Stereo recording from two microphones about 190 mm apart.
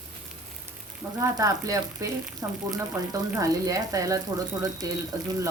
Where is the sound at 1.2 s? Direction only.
15° right (ahead or behind).